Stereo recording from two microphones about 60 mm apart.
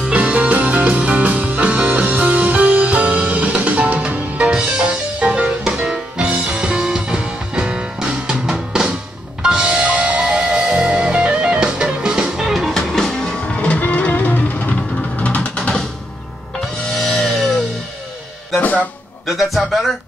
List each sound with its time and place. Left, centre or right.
0.0 s music: right
12.7 s music: centre
13.6 s music: left
15.1 s a sound: left
17.1 s music: centre
19.2 s music: centre